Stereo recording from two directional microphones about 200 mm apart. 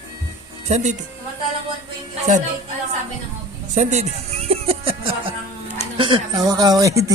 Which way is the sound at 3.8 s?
35° right (ahead or behind).